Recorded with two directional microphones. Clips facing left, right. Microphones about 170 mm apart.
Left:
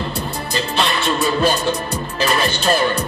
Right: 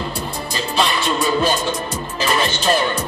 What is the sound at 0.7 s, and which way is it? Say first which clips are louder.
Music: right 1 dB; centre (ahead or behind).